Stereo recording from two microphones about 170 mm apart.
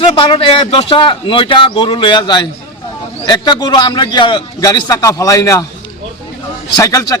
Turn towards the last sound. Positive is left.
turn(degrees=20)  # may be behind; listen again after turning